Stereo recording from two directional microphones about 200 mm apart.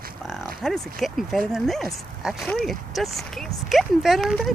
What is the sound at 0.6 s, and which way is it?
Speech, centre (ahead or behind).